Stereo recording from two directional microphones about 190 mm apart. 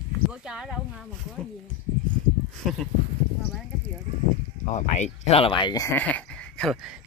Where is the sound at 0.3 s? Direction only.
5° right (ahead or behind).